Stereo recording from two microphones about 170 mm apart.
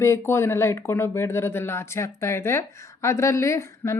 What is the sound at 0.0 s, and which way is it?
Speech, 15° left (ahead or behind).